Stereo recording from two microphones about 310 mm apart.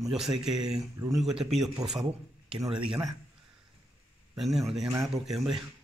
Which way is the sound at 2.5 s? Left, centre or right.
Centre.